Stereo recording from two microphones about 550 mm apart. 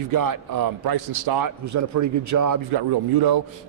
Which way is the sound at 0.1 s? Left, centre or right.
Right.